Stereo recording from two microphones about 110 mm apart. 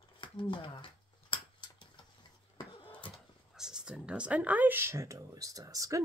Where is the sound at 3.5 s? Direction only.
5° right (ahead or behind); by 6.0 s 30° right (ahead or behind).